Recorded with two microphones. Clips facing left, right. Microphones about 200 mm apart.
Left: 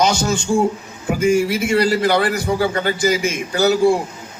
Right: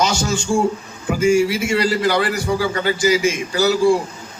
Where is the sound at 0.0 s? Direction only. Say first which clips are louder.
Left 2 dB; 55° left (ahead or behind).